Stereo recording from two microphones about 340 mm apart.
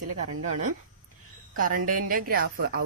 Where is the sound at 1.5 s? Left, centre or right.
Right.